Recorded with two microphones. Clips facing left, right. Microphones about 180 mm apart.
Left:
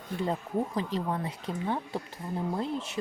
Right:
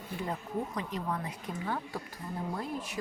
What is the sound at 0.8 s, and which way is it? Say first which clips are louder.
Speech: left 4 dB; 30° left (ahead or behind).